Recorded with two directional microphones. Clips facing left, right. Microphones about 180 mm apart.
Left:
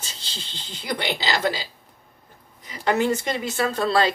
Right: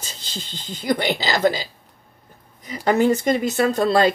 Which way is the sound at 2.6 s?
40° right (ahead or behind).